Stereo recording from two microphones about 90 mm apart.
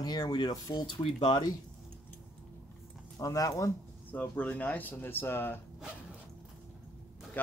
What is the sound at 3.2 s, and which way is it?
Speech, 40° left (ahead or behind).